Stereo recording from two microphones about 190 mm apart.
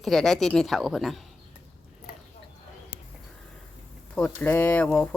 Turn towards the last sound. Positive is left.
turn(degrees=5)  # may be behind; listen again after turning